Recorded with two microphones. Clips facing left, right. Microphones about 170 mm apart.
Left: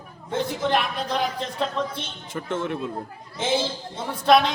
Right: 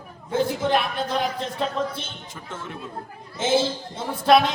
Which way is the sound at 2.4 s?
65° left (ahead or behind).